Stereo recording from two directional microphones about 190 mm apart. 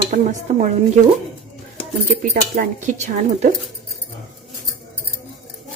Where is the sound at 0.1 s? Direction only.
40° right (ahead or behind).